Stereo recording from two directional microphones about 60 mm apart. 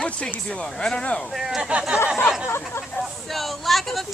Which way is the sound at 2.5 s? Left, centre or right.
Left.